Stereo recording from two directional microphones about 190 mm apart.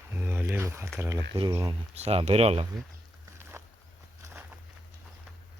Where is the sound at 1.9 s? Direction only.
35° right (ahead or behind).